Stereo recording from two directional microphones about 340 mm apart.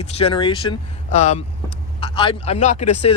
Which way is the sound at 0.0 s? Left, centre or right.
Centre.